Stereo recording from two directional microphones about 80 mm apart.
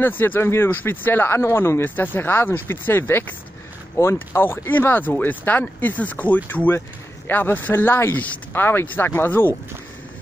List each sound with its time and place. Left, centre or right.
0.2 s speech: left